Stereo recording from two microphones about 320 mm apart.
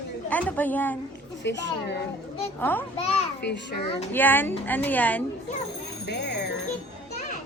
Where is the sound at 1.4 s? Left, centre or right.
Left.